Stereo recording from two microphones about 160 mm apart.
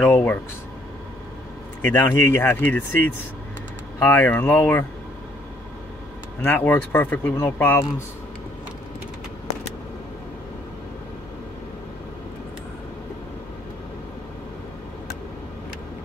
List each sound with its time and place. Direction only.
0.0 s speech: 10° left (ahead or behind)
2.0 s speech: 15° left (ahead or behind)
6.4 s speech: 10° left (ahead or behind)